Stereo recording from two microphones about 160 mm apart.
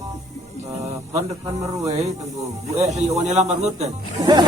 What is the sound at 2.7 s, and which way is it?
Speech, 45° right (ahead or behind).